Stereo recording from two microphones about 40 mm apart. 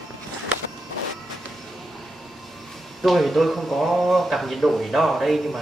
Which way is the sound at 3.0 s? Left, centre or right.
Centre.